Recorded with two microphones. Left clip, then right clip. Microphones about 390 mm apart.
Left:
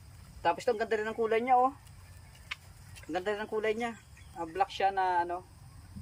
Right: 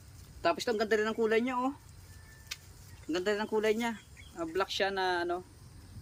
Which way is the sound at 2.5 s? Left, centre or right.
Centre.